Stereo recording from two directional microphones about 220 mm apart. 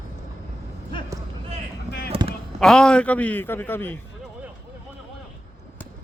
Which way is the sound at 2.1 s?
25° right (ahead or behind).